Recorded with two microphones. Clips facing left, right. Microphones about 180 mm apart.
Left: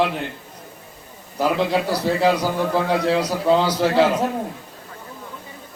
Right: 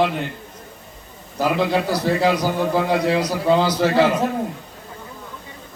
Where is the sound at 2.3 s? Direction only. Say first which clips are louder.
Right 1 dB; 10° right (ahead or behind).